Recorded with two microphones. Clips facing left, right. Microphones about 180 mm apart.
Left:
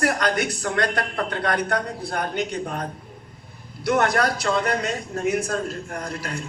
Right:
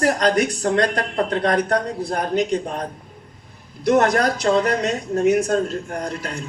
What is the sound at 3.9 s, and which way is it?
Speech, 40° right (ahead or behind).